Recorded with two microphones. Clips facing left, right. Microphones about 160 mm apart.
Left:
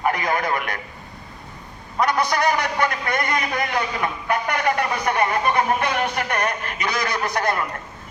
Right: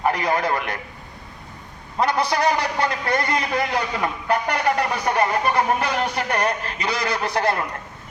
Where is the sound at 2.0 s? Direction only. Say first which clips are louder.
Even; 30° right (ahead or behind).